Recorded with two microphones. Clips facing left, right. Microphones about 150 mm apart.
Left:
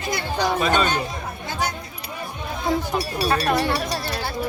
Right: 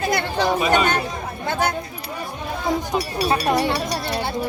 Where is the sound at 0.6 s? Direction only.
15° right (ahead or behind).